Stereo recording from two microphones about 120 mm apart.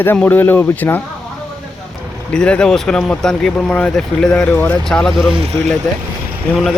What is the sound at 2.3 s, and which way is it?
Speech, 10° left (ahead or behind).